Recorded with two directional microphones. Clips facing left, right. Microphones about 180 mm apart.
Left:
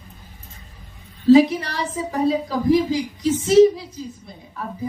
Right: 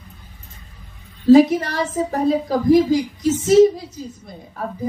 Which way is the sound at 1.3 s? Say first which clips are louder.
Right 2 dB; 45° right (ahead or behind).